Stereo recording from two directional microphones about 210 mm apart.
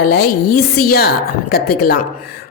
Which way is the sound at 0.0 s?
50° left (ahead or behind).